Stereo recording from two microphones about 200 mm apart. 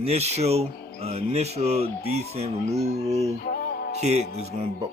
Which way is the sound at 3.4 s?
50° left (ahead or behind).